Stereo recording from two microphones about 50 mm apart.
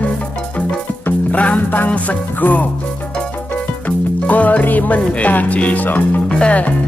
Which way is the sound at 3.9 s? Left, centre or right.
Left.